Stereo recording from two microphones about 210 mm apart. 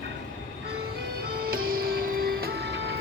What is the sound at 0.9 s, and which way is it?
Music, 45° right (ahead or behind).